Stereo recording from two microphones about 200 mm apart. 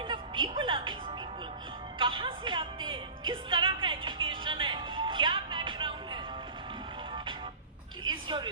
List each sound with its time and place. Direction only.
0.1 s music: 25° right (ahead or behind)
2.0 s music: 25° right (ahead or behind)
8.0 s a sound: 25° right (ahead or behind)